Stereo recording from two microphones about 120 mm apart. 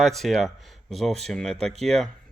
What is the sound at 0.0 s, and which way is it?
Speech, centre (ahead or behind).